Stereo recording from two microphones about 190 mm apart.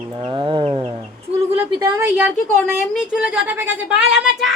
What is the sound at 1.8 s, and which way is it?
A woman's voice, 10° right (ahead or behind).